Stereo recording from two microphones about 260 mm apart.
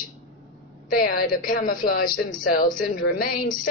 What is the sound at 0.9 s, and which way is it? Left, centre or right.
Speech, left.